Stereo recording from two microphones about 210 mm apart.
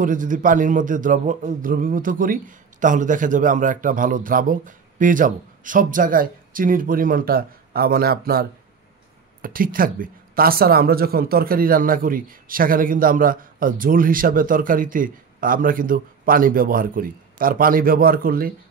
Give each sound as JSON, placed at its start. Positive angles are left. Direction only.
{"t": 0.0, "sound": "a man's voice", "side_deg": -40}